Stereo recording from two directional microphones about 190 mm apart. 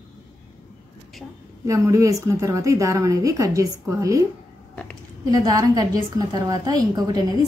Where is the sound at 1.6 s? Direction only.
15° right (ahead or behind).